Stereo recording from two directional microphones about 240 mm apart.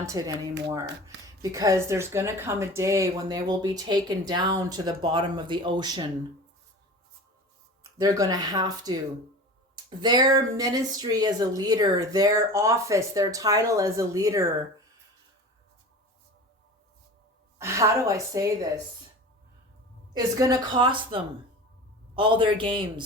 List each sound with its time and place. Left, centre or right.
0.0 s speech: centre
7.9 s speech: centre
17.6 s speech: centre
20.1 s a man's voice: centre